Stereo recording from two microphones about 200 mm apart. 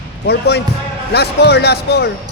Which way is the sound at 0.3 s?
55° left (ahead or behind).